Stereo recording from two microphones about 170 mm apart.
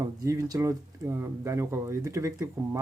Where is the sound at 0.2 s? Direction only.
20° right (ahead or behind).